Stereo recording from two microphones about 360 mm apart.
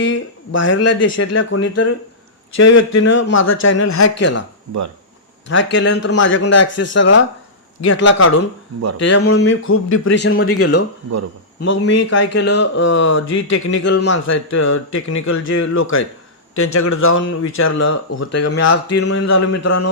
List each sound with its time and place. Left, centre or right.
0.1 s speech: left
5.5 s speech: left
13.1 s speech: left
13.3 s speech: left
17.4 s speech: left
18.2 s speech: left
19.3 s speech: left